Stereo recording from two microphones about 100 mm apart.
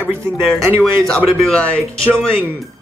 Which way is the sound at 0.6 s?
25° right (ahead or behind).